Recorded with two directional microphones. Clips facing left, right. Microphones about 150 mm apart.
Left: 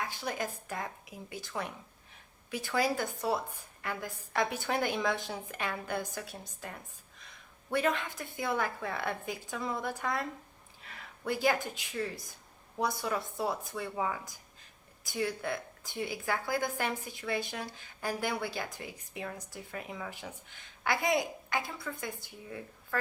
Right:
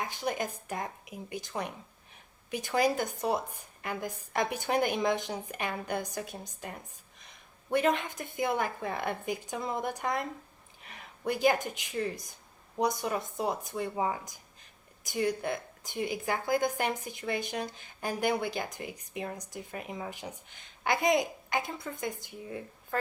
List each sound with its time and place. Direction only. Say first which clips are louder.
0.0 s a woman's voice: right 3 dB; 20° right (ahead or behind)